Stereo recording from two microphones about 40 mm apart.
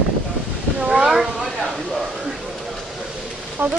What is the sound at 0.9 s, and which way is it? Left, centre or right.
Cat, centre.